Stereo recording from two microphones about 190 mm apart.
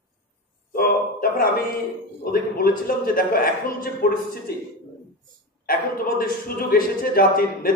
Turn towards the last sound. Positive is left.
turn(degrees=50)  # may be behind; listen again after turning